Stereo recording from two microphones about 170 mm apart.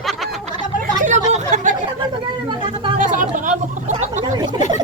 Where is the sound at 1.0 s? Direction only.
45° right (ahead or behind).